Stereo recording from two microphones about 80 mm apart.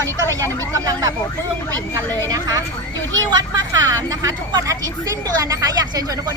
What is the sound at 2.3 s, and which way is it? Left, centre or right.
Speech, right.